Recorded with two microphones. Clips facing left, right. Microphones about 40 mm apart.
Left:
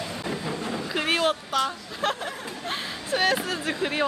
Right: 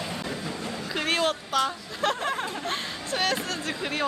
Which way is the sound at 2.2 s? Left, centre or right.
Right.